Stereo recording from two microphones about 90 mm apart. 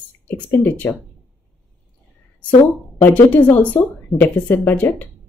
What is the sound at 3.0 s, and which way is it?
Speech, 20° left (ahead or behind).